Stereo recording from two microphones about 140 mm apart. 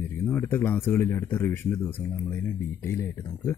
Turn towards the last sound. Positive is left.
turn(degrees=15)  # may be behind; listen again after turning